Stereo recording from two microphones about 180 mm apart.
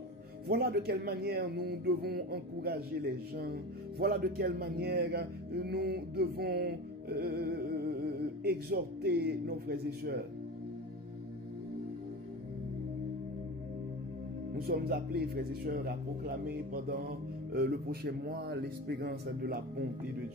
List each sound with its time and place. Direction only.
0.5 s speech: 60° right (ahead or behind)
4.0 s speech: 60° right (ahead or behind)
14.7 s speech: 60° right (ahead or behind)